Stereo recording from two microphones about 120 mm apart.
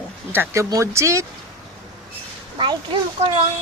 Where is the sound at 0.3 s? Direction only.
25° right (ahead or behind).